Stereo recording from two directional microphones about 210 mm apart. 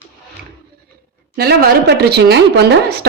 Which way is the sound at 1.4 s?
50° right (ahead or behind).